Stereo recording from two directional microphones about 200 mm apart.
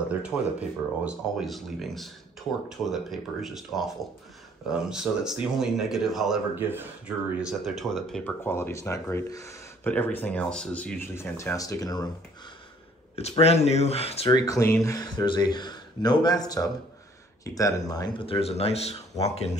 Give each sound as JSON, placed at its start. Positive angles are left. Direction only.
{"t": 0.2, "sound": "speech", "side_deg": -5}
{"t": 13.1, "sound": "speech", "side_deg": 30}
{"t": 14.4, "sound": "speech", "side_deg": 15}